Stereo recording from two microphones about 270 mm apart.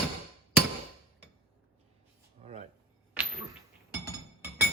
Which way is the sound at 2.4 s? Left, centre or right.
Right.